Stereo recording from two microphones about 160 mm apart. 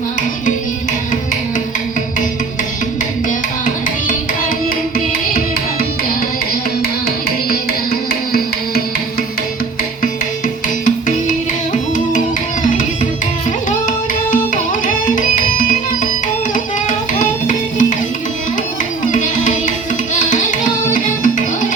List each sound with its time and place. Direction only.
10.8 s music: 55° left (ahead or behind)
13.7 s music: 55° left (ahead or behind)
17.2 s music: 55° left (ahead or behind)
19.1 s music: 55° left (ahead or behind)